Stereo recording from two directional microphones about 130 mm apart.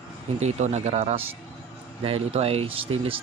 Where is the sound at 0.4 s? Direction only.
60° right (ahead or behind).